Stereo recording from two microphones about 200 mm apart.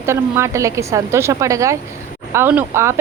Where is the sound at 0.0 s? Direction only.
15° right (ahead or behind).